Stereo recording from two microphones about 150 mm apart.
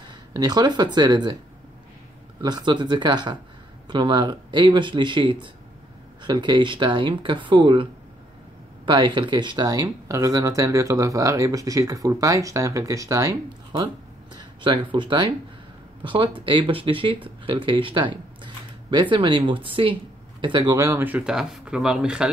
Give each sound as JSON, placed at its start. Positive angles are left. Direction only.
{"t": 0.3, "sound": "speech", "side_deg": -25}
{"t": 2.4, "sound": "speech", "side_deg": -30}
{"t": 14.3, "sound": "speech", "side_deg": -35}